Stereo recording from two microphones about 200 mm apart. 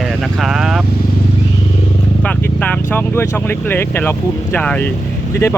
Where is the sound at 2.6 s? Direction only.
10° left (ahead or behind).